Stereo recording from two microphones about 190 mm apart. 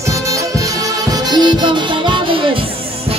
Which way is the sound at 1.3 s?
20° right (ahead or behind).